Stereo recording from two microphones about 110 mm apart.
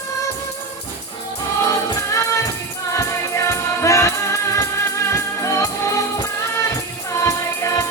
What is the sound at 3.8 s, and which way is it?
Music, 25° left (ahead or behind).